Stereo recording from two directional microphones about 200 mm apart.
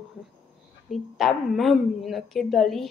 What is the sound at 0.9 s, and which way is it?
Speech, centre (ahead or behind).